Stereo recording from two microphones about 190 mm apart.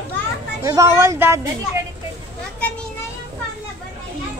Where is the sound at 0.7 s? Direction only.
15° right (ahead or behind).